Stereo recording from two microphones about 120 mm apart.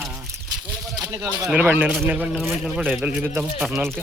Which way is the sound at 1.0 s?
25° right (ahead or behind).